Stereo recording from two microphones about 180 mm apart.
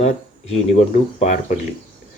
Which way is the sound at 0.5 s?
40° left (ahead or behind).